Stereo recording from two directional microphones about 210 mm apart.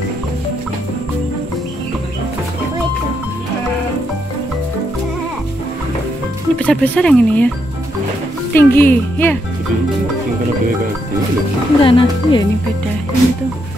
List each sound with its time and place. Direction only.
6.6 s speech: 5° left (ahead or behind)
8.5 s speech: 10° left (ahead or behind)
11.8 s speech: 25° left (ahead or behind)